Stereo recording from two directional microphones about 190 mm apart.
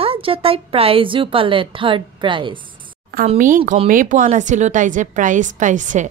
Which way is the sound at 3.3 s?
45° right (ahead or behind).